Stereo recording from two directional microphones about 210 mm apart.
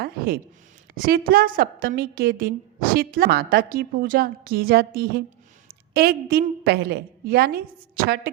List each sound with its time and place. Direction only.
0.9 s a woman's voice: 45° right (ahead or behind)